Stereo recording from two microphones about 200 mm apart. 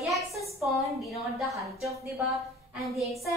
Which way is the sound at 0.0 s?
Centre (ahead or behind).